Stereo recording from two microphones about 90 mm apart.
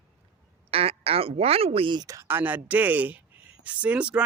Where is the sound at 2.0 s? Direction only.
35° right (ahead or behind).